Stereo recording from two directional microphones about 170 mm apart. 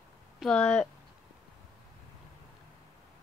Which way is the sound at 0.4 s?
5° left (ahead or behind).